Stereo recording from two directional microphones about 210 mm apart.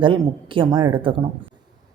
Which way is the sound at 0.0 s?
25° right (ahead or behind).